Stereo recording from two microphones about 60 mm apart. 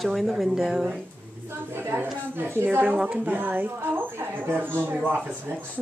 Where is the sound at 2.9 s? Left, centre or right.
Centre.